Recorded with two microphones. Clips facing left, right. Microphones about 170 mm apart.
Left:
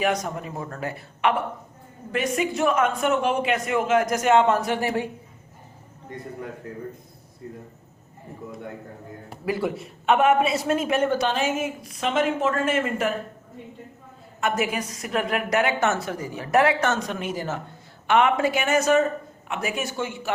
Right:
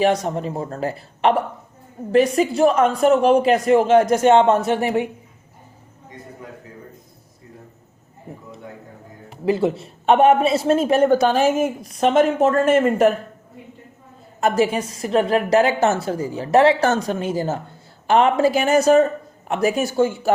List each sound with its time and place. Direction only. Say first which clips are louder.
0.0 s a man's voice: right 6 dB; 30° right (ahead or behind)
9.5 s a man's voice: right 7 dB; 25° right (ahead or behind); by 13.1 s 45° right (ahead or behind)
14.4 s a woman's voice: right 6 dB; 30° right (ahead or behind)